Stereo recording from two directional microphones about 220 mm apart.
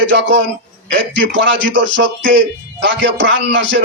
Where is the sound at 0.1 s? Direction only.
55° right (ahead or behind).